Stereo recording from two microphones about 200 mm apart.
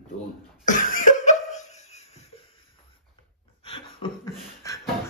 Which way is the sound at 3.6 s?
25° left (ahead or behind).